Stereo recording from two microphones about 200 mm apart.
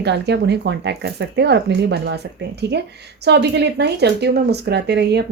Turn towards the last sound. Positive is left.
turn(degrees=-55)  # may be behind; listen again after turning